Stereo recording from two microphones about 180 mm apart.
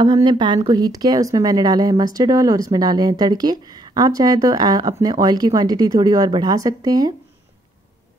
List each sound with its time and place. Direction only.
0.0 s a woman's voice: 25° right (ahead or behind)